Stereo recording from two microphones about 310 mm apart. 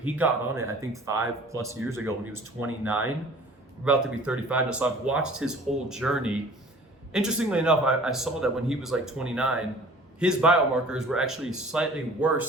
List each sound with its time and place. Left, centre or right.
0.0 s a man's voice: centre